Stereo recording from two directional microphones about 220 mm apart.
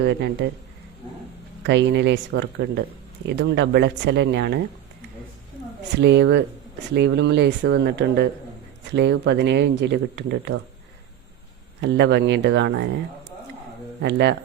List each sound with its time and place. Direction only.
0.0 s speech: 50° right (ahead or behind)
1.6 s speech: 55° right (ahead or behind)
6.0 s speech: 50° right (ahead or behind)
11.8 s speech: 55° right (ahead or behind)
14.0 s speech: 50° right (ahead or behind)